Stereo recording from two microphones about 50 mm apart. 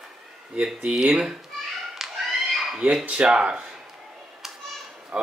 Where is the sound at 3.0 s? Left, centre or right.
Centre.